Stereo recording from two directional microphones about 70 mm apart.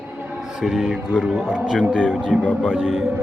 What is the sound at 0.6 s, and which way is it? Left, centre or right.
Speech, centre.